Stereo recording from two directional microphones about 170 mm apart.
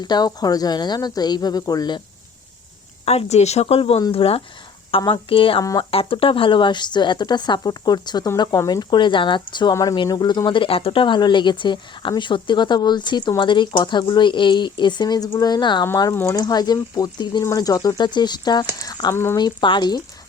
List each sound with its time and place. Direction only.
0.0 s speech: 25° left (ahead or behind)
3.1 s speech: 40° left (ahead or behind); by 19.4 s 15° left (ahead or behind)
19.4 s speech: 25° left (ahead or behind)